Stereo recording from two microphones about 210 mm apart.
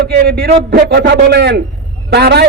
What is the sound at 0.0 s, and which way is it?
A man's voice, 50° right (ahead or behind).